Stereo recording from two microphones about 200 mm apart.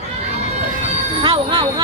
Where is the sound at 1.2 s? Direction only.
25° right (ahead or behind).